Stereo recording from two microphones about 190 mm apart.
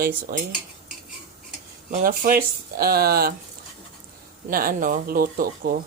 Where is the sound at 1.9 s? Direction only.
45° right (ahead or behind).